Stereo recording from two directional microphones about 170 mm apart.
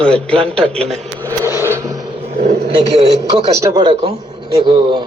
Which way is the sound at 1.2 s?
15° right (ahead or behind).